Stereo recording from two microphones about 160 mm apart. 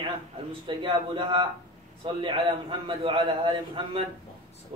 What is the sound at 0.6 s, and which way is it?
A man's voice, 30° right (ahead or behind).